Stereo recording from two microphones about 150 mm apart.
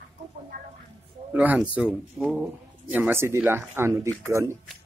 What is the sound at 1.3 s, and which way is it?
Speech, 10° right (ahead or behind).